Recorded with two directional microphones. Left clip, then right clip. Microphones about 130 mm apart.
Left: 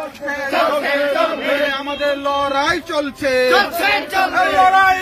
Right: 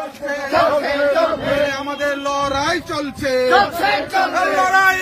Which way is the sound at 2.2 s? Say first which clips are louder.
Left 2 dB; 20° right (ahead or behind).